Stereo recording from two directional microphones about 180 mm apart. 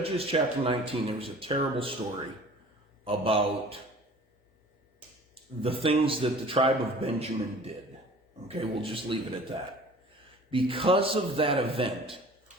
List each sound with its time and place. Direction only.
0.0 s a man's voice: 35° right (ahead or behind)
3.0 s a man's voice: 30° right (ahead or behind)
5.3 s a man's voice: 30° right (ahead or behind)